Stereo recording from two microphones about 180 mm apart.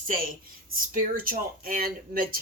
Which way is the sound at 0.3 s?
50° right (ahead or behind).